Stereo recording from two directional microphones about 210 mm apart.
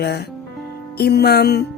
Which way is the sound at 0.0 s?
50° left (ahead or behind).